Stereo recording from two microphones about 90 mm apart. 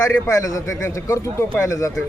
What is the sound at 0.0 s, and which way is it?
A man's voice, 30° left (ahead or behind).